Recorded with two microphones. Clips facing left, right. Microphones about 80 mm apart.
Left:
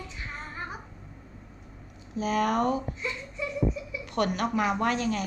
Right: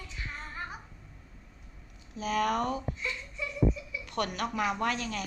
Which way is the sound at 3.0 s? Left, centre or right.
Left.